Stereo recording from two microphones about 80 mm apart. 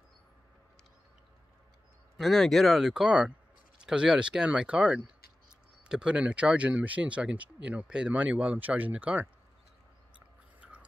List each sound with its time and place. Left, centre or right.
2.1 s speech: centre
10.1 s biting: centre